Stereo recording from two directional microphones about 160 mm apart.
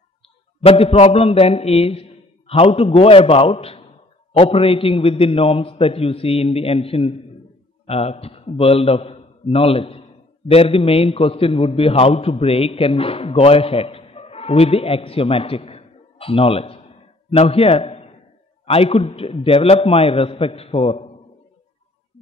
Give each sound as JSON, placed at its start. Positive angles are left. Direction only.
{"t": 0.6, "sound": "a man's voice", "side_deg": 35}